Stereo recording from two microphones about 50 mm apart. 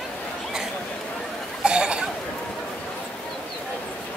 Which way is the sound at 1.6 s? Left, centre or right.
Centre.